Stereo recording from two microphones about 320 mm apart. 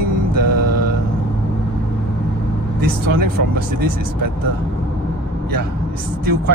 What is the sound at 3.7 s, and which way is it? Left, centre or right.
Speech, right.